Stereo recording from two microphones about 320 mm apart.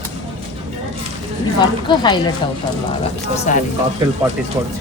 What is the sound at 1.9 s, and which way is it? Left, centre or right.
Speech, centre.